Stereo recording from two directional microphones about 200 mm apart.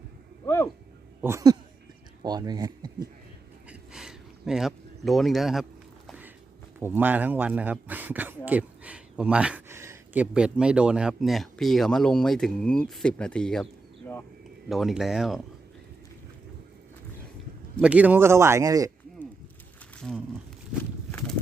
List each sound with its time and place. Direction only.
0.4 s speech: 10° left (ahead or behind)
1.2 s speech: 15° right (ahead or behind)
3.7 s a sound: centre (ahead or behind)
6.7 s speech: 10° right (ahead or behind)
14.7 s speech: centre (ahead or behind)
17.7 s speech: 5° right (ahead or behind)